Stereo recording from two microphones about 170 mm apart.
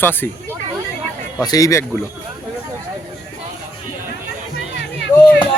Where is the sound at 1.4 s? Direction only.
20° left (ahead or behind).